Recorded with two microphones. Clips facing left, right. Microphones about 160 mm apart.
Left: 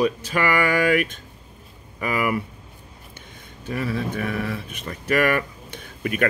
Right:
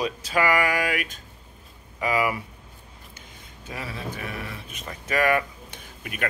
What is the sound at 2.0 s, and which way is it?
Speech, 55° left (ahead or behind).